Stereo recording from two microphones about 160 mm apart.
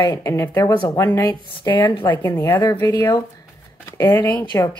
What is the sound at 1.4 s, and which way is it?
Speech, 30° left (ahead or behind).